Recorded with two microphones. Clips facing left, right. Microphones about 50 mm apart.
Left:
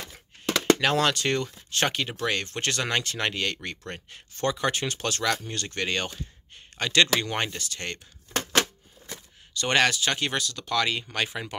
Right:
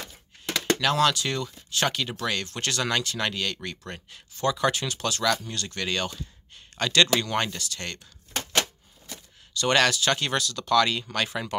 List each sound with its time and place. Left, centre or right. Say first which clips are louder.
0.7 s speech: right 1 dB; left
6.8 s speech: right 1 dB; left
9.6 s speech: right 1 dB; left